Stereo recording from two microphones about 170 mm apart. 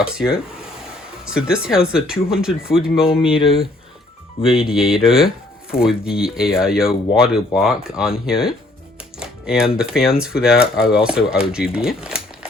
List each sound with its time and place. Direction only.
0.0 s speech: 5° right (ahead or behind)
3.3 s speech: 30° left (ahead or behind)
4.4 s speech: 5° right (ahead or behind)